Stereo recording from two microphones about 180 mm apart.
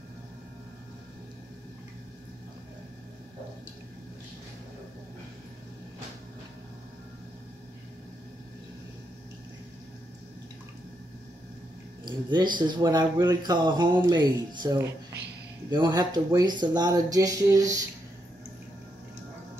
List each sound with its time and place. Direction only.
12.0 s speech: 25° right (ahead or behind)